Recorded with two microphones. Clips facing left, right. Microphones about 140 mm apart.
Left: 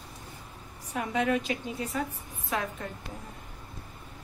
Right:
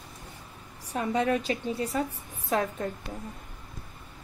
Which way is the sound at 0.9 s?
35° right (ahead or behind).